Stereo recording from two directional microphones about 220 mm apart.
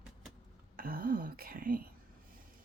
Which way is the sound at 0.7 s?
40° right (ahead or behind).